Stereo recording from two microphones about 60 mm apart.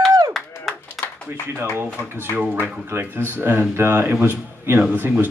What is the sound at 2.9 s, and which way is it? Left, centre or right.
A man's voice, right.